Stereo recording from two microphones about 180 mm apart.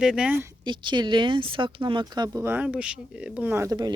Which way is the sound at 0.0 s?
5° right (ahead or behind).